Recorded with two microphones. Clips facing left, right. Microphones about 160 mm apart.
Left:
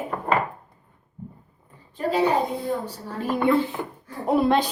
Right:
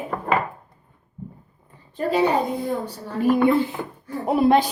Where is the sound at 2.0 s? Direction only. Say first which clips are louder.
Right 2 dB; 65° right (ahead or behind).